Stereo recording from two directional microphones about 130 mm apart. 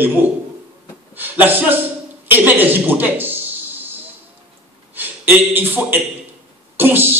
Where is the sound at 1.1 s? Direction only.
15° right (ahead or behind).